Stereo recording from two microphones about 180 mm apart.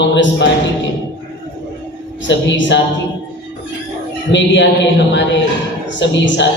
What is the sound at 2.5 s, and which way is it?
Speech, 90° left.